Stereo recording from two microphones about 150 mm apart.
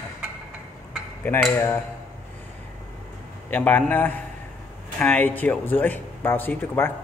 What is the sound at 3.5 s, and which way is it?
Speech, 10° left (ahead or behind).